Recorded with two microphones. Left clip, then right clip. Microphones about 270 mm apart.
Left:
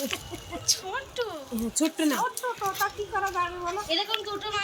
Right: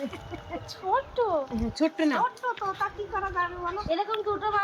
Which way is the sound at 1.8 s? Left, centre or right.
Centre.